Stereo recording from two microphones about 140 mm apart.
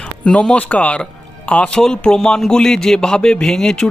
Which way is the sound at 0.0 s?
5° left (ahead or behind).